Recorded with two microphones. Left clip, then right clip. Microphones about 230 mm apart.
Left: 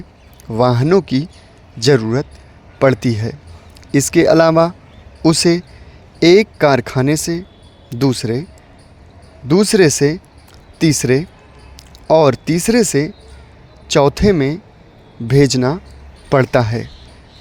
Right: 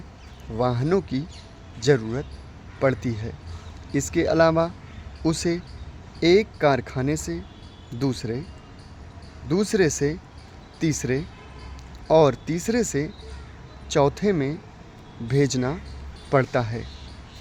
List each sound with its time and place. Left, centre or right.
0.5 s speech: left
9.5 s speech: left